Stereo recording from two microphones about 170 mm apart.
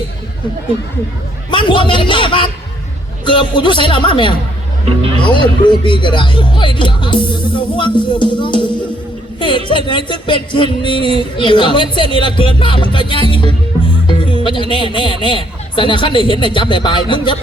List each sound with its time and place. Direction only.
1.5 s a man's voice: 30° left (ahead or behind)
9.6 s a man's voice: 30° left (ahead or behind)